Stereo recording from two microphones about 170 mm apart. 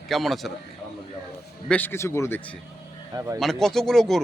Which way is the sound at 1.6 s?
10° left (ahead or behind).